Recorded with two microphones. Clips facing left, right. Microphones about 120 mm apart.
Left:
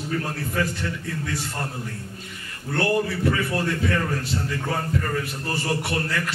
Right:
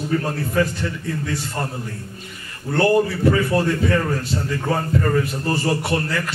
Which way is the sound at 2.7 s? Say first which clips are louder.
Right 6 dB; 35° right (ahead or behind).